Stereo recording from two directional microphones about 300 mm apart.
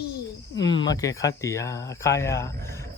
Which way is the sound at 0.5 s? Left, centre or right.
Left.